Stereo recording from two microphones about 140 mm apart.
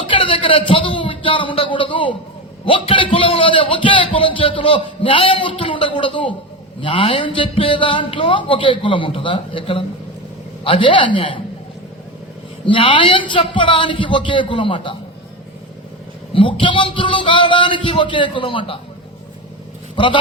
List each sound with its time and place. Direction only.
0.1 s a man's voice: 40° left (ahead or behind)
12.6 s a man's voice: 35° left (ahead or behind)
16.3 s a man's voice: 40° left (ahead or behind)
20.0 s a man's voice: 35° left (ahead or behind)